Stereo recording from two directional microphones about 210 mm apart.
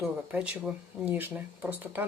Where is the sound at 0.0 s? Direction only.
5° right (ahead or behind).